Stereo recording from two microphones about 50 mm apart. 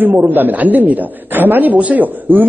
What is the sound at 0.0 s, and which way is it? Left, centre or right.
A woman's voice, right.